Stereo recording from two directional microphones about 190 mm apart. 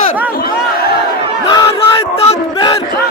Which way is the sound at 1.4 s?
20° left (ahead or behind).